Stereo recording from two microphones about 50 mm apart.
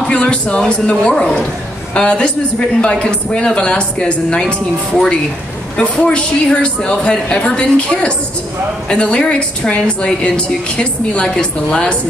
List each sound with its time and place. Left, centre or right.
0.1 s a man's voice: left
5.8 s a woman's voice: left